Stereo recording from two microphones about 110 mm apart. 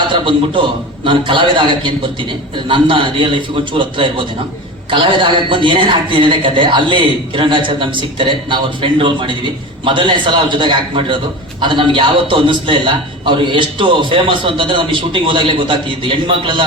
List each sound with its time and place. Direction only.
0.1 s a man's voice: 50° right (ahead or behind)